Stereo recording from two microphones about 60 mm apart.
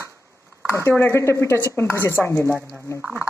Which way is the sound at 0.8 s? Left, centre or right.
Left.